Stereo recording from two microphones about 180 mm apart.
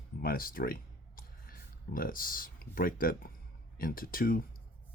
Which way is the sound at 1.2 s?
55° left (ahead or behind).